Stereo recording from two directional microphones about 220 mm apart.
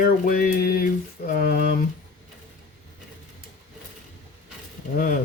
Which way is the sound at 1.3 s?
45° left (ahead or behind).